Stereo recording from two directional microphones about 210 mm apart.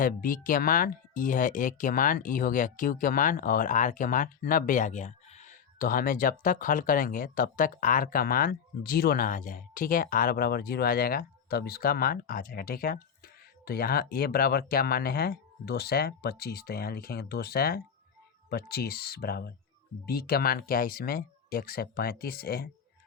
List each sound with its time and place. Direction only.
0.0 s speech: 40° left (ahead or behind)